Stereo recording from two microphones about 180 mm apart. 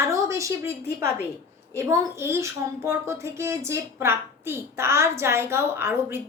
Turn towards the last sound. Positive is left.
turn(degrees=-15)  # may be behind; listen again after turning